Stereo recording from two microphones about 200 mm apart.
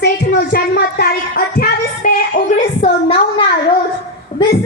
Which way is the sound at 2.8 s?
30° left (ahead or behind).